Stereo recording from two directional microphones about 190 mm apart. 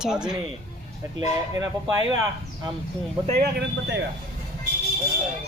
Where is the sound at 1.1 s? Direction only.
20° right (ahead or behind).